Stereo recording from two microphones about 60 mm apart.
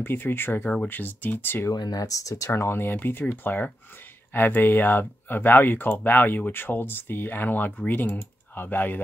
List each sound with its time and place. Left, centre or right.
0.0 s speech: left
1.7 s speech: left
2.6 s speech: left